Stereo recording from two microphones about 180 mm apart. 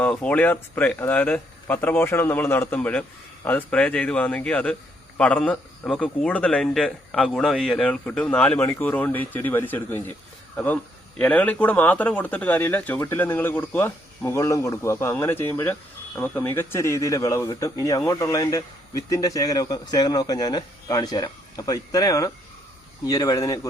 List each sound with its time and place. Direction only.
0.0 s a man's voice: 5° left (ahead or behind)
11.2 s a man's voice: 10° left (ahead or behind)